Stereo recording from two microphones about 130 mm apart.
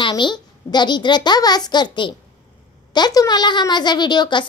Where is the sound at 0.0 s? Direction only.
35° left (ahead or behind).